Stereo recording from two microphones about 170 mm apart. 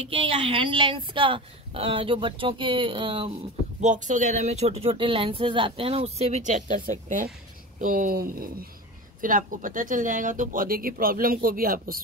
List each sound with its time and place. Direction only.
0.1 s speech: 30° right (ahead or behind)
3.8 s speech: 45° right (ahead or behind); by 8.6 s 60° right (ahead or behind)
9.2 s speech: 50° right (ahead or behind)